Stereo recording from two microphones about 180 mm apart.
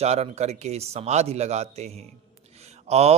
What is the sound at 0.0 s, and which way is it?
A man's voice, 35° right (ahead or behind).